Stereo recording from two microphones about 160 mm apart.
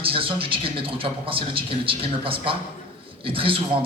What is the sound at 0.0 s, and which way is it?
A man's voice, 35° right (ahead or behind).